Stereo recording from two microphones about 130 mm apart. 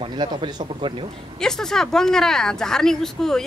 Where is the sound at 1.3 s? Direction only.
5° left (ahead or behind).